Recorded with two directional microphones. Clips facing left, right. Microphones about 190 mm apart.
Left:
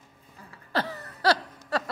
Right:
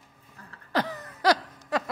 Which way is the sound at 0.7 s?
15° right (ahead or behind).